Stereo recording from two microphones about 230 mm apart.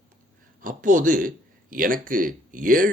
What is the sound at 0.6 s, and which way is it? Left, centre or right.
A man's voice, right.